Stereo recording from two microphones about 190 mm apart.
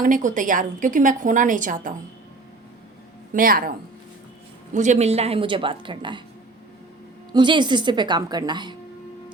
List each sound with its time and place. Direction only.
0.0 s a woman's voice: 45° right (ahead or behind)
3.3 s a woman's voice: 50° right (ahead or behind); by 6.2 s 25° right (ahead or behind)
7.3 s a woman's voice: 25° right (ahead or behind)